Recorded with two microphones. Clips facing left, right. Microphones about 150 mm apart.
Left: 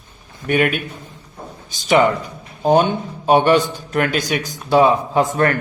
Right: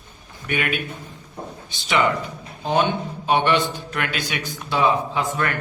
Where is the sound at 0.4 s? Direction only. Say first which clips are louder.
Left 7 dB; 45° left (ahead or behind).